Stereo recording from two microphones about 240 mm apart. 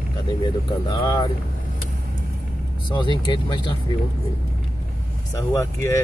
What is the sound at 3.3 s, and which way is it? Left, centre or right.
Speech, centre.